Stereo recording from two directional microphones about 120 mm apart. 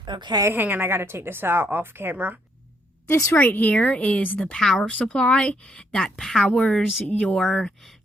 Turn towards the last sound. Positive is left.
turn(degrees=5)  # may be behind; listen again after turning